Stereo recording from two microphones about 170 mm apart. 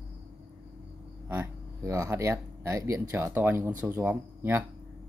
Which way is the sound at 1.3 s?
15° right (ahead or behind).